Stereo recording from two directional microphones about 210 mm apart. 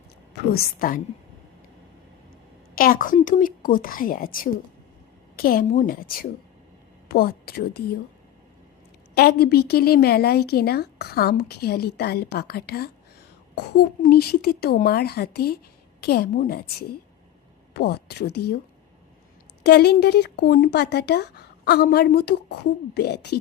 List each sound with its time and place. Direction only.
0.5 s a woman's voice: 40° left (ahead or behind)
2.7 s a woman's voice: 40° left (ahead or behind)
9.1 s a woman's voice: 50° left (ahead or behind)
14.0 s a woman's voice: 45° left (ahead or behind)
19.6 s a woman's voice: 50° left (ahead or behind)